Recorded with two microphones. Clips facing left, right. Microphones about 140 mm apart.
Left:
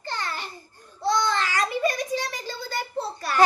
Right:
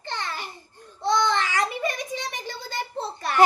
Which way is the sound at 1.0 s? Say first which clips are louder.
Right 1 dB; 20° right (ahead or behind).